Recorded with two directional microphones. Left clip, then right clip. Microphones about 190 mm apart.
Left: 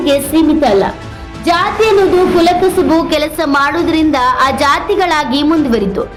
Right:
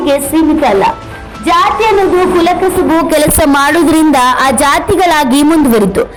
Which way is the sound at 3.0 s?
35° right (ahead or behind).